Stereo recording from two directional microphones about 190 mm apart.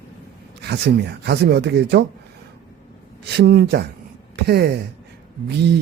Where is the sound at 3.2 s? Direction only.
60° right (ahead or behind).